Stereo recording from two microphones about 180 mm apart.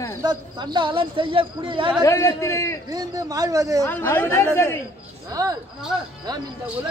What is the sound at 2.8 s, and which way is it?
Speech, 20° right (ahead or behind).